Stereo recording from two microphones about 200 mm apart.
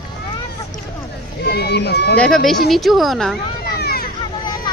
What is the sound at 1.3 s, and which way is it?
Speech, 55° left (ahead or behind).